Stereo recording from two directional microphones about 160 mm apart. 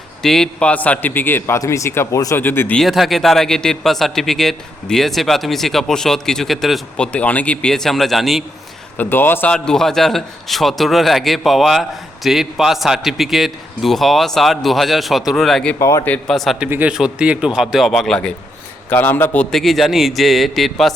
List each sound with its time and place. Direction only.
0.2 s a man's voice: centre (ahead or behind)
9.0 s a man's voice: 15° left (ahead or behind)
15.8 s speech: 20° left (ahead or behind); by 16.6 s centre (ahead or behind)
16.6 s a man's voice: 10° right (ahead or behind)